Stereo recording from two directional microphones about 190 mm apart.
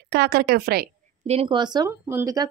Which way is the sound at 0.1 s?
60° right (ahead or behind).